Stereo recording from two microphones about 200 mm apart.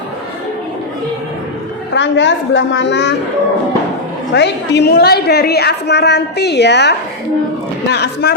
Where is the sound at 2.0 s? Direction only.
65° left (ahead or behind).